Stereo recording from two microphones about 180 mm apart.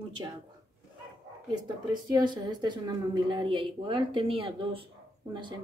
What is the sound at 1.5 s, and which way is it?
A woman's voice, 25° right (ahead or behind).